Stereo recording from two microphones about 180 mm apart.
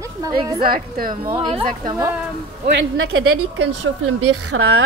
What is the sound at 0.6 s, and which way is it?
Speech, 55° right (ahead or behind).